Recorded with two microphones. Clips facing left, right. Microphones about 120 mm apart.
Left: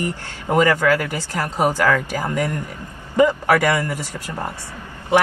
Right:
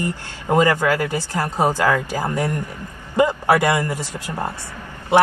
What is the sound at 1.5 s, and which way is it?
Speech, 15° left (ahead or behind).